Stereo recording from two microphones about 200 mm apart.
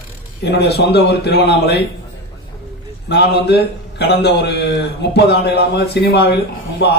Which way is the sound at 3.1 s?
55° left (ahead or behind).